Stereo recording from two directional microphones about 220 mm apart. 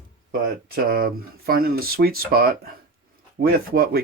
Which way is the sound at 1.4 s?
40° right (ahead or behind).